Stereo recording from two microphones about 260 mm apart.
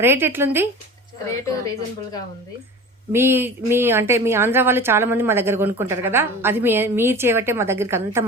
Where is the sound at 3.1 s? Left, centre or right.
Centre.